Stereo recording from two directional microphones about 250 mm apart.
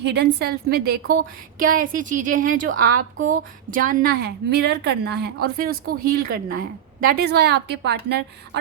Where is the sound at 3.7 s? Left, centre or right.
Right.